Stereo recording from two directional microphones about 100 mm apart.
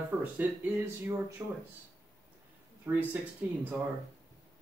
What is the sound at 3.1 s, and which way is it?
Speech, 15° right (ahead or behind).